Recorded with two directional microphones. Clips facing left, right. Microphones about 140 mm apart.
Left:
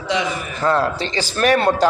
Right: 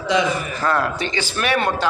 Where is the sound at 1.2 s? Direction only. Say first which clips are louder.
Left 5 dB; 35° left (ahead or behind).